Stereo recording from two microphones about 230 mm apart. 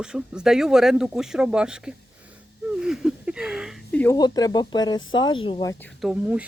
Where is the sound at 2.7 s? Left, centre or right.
Centre.